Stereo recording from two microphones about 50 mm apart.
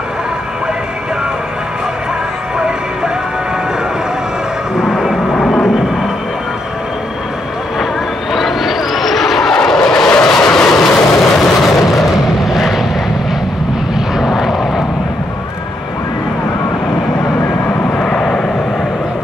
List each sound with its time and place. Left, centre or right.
4.7 s vehicle: centre
8.3 s vehicle: centre
11.1 s a sound: centre
12.4 s vehicle: centre
14.1 s vehicle: centre
17.9 s vehicle: centre